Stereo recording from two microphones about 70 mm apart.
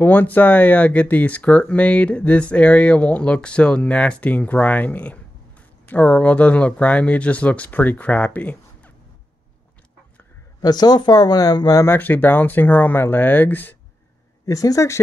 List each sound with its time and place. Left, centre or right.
0.0 s speech: left
10.6 s speech: left
11.8 s speech: left
14.4 s speech: left